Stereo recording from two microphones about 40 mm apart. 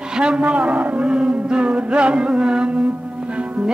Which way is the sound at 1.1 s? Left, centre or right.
Right.